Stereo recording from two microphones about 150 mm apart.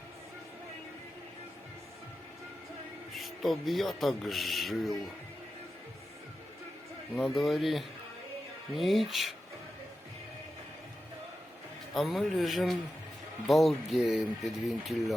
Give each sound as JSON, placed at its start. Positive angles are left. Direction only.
{"t": 3.2, "sound": "speech", "side_deg": 0}
{"t": 7.3, "sound": "speech", "side_deg": 0}
{"t": 11.9, "sound": "speech", "side_deg": 0}